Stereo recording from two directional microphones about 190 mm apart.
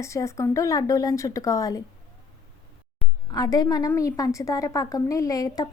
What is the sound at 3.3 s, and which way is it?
A woman's voice, 20° left (ahead or behind).